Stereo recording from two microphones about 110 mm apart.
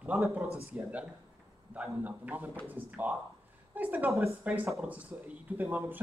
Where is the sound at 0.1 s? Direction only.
15° right (ahead or behind).